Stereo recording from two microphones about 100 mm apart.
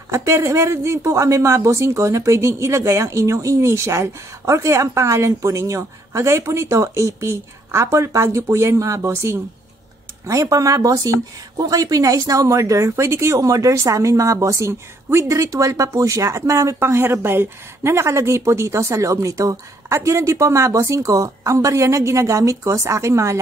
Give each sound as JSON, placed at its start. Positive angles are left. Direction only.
{"t": 0.1, "sound": "speech", "side_deg": -30}